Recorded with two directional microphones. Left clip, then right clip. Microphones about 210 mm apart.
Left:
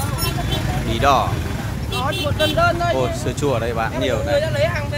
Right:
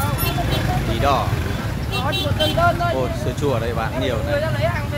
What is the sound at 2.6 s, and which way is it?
Speech, 55° left (ahead or behind).